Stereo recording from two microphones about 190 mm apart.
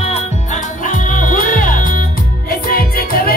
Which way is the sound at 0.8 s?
45° left (ahead or behind).